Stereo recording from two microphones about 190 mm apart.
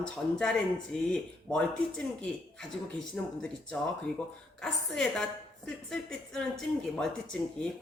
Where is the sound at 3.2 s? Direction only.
5° left (ahead or behind).